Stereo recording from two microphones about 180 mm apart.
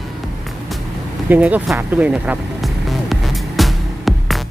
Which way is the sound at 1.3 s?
10° right (ahead or behind).